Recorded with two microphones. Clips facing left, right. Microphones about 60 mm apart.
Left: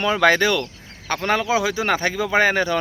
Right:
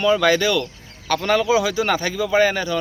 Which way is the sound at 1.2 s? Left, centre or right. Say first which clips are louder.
Right 2 dB; left.